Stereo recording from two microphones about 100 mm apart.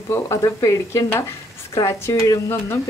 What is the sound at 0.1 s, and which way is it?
Speech, 30° left (ahead or behind).